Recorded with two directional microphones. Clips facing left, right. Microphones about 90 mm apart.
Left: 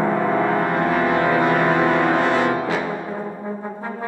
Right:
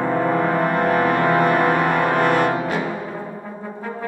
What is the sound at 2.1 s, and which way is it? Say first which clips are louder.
Music: even; 55° right (ahead or behind).